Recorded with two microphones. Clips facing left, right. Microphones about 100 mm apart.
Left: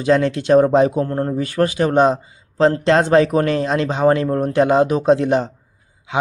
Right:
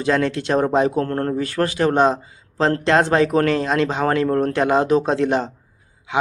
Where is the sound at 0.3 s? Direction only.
20° left (ahead or behind).